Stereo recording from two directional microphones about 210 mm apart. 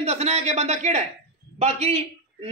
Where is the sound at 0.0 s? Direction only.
30° right (ahead or behind).